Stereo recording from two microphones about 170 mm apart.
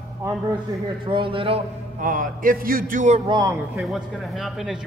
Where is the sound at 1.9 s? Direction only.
50° right (ahead or behind).